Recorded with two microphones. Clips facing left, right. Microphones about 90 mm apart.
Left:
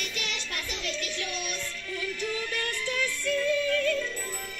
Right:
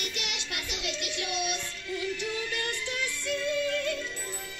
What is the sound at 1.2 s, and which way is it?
Music, 45° left (ahead or behind).